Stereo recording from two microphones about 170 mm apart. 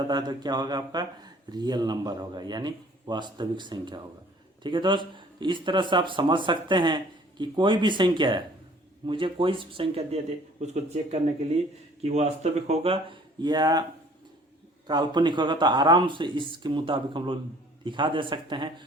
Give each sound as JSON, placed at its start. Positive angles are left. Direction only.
{"t": 0.1, "sound": "speech", "side_deg": -25}
{"t": 14.8, "sound": "speech", "side_deg": -25}